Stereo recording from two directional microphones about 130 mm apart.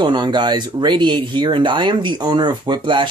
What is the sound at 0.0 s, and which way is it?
Speech, 35° right (ahead or behind).